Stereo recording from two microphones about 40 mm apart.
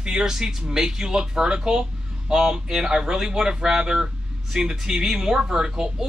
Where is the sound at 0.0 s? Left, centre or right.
Centre.